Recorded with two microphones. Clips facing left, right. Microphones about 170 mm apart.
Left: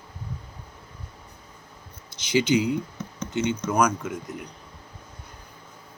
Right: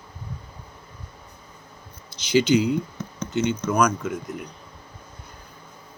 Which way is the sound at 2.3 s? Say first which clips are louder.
Right 3 dB; 20° left (ahead or behind).